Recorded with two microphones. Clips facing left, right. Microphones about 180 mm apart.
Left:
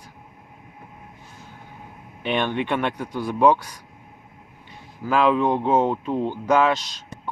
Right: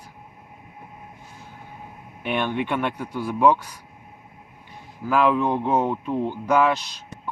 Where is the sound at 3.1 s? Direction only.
35° left (ahead or behind).